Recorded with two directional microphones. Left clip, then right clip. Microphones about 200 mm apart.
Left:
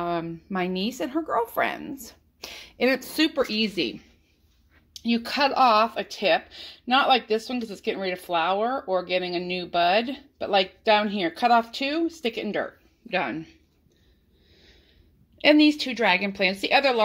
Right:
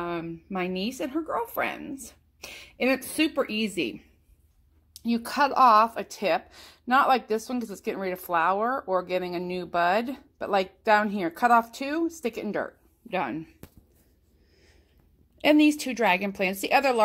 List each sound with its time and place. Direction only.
0.0 s speech: 5° right (ahead or behind)
5.2 s speech: 10° right (ahead or behind)
7.1 s speech: 35° right (ahead or behind)
7.3 s speech: 10° right (ahead or behind)
7.8 s speech: 40° right (ahead or behind)
8.3 s speech: 10° right (ahead or behind)
9.0 s speech: 40° right (ahead or behind)
12.5 s speech: 10° right (ahead or behind)
15.3 s speech: 10° right (ahead or behind)